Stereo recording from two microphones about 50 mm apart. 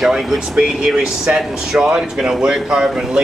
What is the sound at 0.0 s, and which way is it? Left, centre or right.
A man's voice, centre.